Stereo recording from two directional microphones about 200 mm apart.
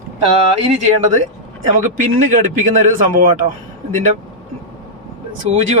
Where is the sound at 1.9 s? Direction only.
40° right (ahead or behind).